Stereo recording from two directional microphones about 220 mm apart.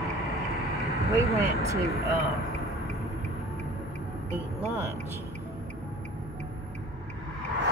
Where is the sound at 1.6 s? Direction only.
15° right (ahead or behind).